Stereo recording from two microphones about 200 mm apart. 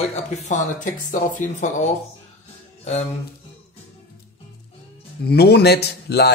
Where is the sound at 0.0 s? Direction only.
35° left (ahead or behind).